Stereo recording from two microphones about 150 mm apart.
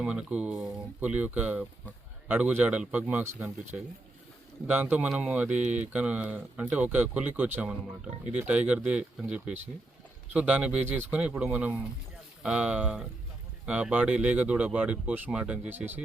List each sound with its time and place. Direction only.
0.0 s speech: 10° right (ahead or behind)
4.6 s speech: 10° right (ahead or behind)